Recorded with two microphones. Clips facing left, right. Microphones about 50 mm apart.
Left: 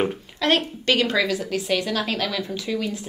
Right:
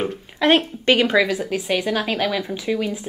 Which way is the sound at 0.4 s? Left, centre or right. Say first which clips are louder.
Right 4 dB; right.